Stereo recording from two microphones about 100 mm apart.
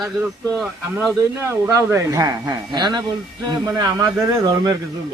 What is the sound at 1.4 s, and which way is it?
Speech, 25° right (ahead or behind).